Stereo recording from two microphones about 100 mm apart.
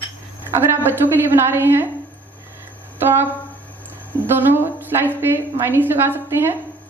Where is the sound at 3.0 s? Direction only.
25° right (ahead or behind).